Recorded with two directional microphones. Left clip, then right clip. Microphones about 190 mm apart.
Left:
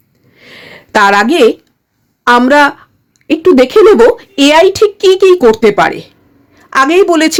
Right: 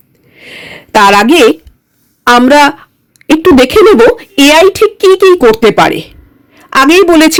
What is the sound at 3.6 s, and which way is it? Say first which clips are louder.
A woman's voice: even; 20° right (ahead or behind).